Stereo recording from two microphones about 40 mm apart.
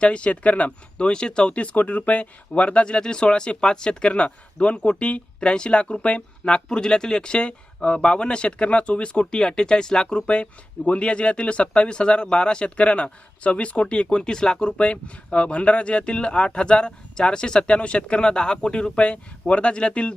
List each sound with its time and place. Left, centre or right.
0.0 s speech: left
1.7 s speech: left